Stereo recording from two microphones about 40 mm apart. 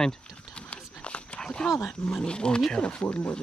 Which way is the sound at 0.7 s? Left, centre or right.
Left.